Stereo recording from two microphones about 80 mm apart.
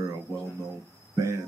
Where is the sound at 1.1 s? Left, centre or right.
Right.